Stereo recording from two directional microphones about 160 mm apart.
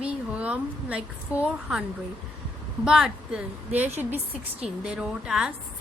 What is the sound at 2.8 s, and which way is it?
A woman's voice, 5° right (ahead or behind).